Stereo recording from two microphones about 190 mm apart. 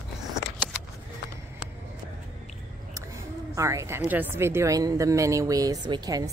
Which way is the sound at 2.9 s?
15° right (ahead or behind).